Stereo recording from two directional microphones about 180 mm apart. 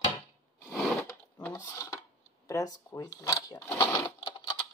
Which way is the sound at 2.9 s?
20° left (ahead or behind).